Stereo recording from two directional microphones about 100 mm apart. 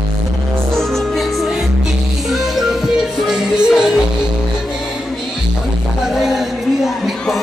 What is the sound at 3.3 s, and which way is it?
Music, 5° right (ahead or behind).